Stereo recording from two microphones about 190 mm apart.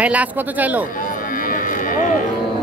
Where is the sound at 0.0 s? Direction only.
5° right (ahead or behind).